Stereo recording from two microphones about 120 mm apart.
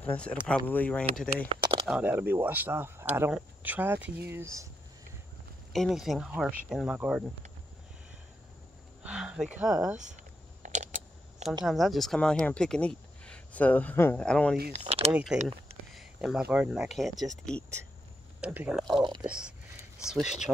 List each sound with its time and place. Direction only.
0.0 s speech: 10° left (ahead or behind)
1.5 s a sound: 40° right (ahead or behind)
1.9 s speech: 10° right (ahead or behind)
5.7 s speech: centre (ahead or behind)
9.0 s speech: 5° right (ahead or behind)
10.6 s a sound: 90° right
11.6 s speech: centre (ahead or behind)
14.8 s speech: 50° right (ahead or behind)
15.3 s speech: 5° right (ahead or behind)
15.9 s a sound: centre (ahead or behind)
16.5 s speech: 5° right (ahead or behind)
18.4 s speech: 10° right (ahead or behind)
18.8 s speech: centre (ahead or behind)